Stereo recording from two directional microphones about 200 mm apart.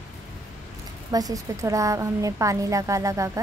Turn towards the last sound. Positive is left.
turn(degrees=-15)  # may be behind; listen again after turning